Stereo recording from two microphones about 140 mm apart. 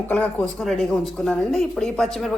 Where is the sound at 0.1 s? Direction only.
10° left (ahead or behind).